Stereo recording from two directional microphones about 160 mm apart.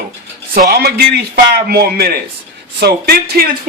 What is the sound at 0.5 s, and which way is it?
A man's voice, 75° right (ahead or behind).